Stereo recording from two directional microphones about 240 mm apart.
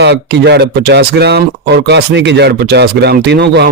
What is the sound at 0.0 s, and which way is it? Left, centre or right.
Speech, right.